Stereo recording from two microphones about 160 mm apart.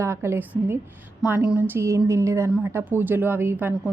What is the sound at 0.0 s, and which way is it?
A woman's voice, 15° right (ahead or behind).